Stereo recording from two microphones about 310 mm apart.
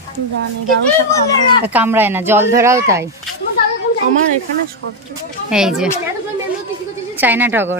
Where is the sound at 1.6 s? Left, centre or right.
Centre.